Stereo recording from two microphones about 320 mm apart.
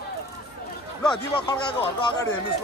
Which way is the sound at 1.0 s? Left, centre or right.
Centre.